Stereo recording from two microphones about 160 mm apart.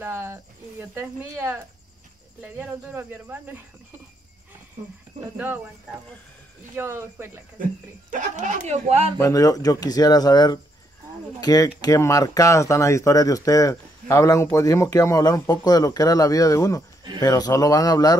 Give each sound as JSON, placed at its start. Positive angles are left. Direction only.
{"t": 0.0, "sound": "a sound", "side_deg": -15}
{"t": 2.4, "sound": "speech", "side_deg": -10}
{"t": 5.4, "sound": "speech", "side_deg": -10}
{"t": 8.1, "sound": "speech", "side_deg": -50}
{"t": 9.2, "sound": "speech", "side_deg": 20}